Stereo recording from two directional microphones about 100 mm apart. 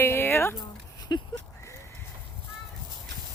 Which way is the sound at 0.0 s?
25° left (ahead or behind).